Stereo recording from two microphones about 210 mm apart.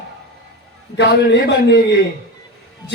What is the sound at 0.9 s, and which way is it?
Speech, 55° left (ahead or behind).